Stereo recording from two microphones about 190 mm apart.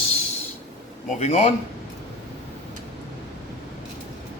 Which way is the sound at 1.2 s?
35° left (ahead or behind).